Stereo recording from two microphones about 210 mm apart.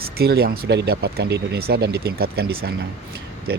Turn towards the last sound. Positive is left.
turn(degrees=-50)  # may be behind; listen again after turning